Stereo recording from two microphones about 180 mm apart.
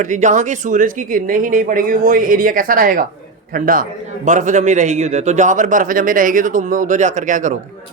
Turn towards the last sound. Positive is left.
turn(degrees=-45)  # may be behind; listen again after turning